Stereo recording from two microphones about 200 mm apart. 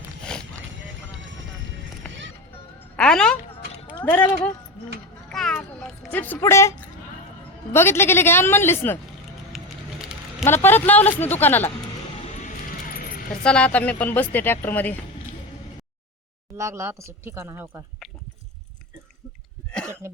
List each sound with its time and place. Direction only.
0.3 s a sound: 5° left (ahead or behind)
2.0 s run: 5° left (ahead or behind)
2.9 s a sound: 5° left (ahead or behind)
4.0 s speech: 10° left (ahead or behind)
5.3 s a sound: centre (ahead or behind)
7.7 s speech: 10° left (ahead or behind)
10.4 s speech: 10° left (ahead or behind)
12.4 s vehicle: 40° left (ahead or behind)
13.4 s speech: 5° left (ahead or behind)
16.6 s speech: 15° right (ahead or behind)
19.9 s speech: 10° right (ahead or behind)